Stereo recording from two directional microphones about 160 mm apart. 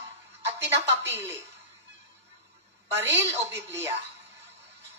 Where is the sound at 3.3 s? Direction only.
15° right (ahead or behind).